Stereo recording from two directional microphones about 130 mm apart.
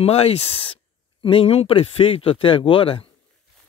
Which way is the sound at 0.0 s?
50° left (ahead or behind).